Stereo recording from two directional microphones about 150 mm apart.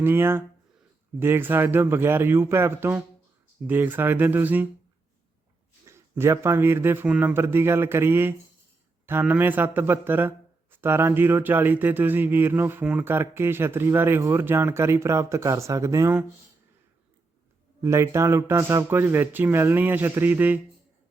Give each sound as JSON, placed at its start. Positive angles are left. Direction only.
{"t": 0.0, "sound": "speech", "side_deg": -15}
{"t": 5.8, "sound": "speech", "side_deg": -15}
{"t": 17.7, "sound": "speech", "side_deg": -20}